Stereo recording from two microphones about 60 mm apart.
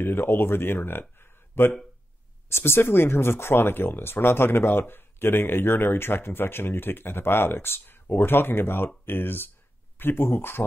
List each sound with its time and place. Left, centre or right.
0.0 s speech: left